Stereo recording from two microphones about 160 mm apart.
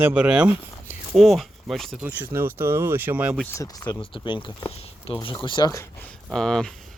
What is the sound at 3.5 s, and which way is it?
Speech, 20° left (ahead or behind).